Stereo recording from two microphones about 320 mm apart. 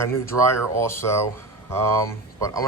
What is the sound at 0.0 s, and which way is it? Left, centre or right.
Speech, centre.